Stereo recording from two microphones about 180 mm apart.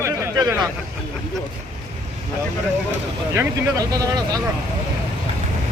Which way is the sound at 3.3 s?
15° right (ahead or behind).